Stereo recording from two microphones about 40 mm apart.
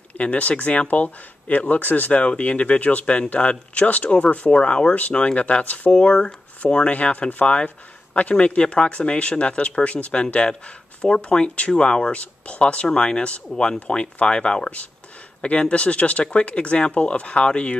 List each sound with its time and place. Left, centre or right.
0.2 s speech: left
10.2 s speech: left
13.5 s speech: centre
13.9 s speech: left